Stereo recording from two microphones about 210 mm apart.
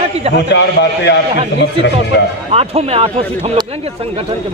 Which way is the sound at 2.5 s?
30° right (ahead or behind).